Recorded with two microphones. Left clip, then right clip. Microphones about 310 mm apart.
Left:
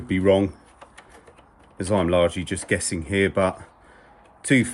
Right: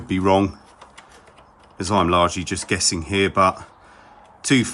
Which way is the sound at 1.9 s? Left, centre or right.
Centre.